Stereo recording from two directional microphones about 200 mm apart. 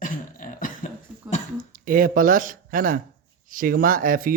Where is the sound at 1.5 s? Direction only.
45° right (ahead or behind).